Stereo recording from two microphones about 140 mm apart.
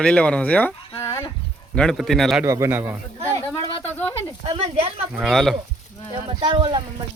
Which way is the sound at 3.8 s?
15° left (ahead or behind).